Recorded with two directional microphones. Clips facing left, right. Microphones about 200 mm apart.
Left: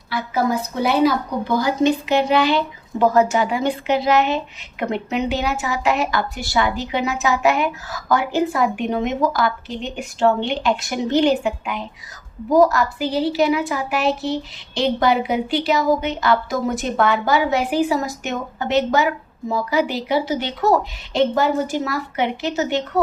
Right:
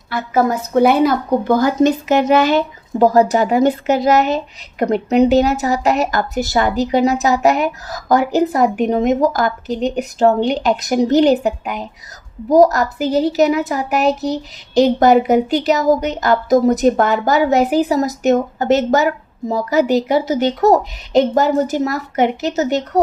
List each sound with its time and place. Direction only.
0.1 s a woman's voice: 50° right (ahead or behind)